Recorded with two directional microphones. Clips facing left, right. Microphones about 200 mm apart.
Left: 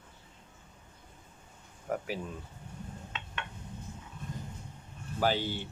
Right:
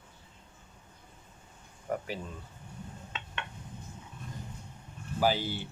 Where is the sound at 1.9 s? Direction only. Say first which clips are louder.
Even; 5° left (ahead or behind).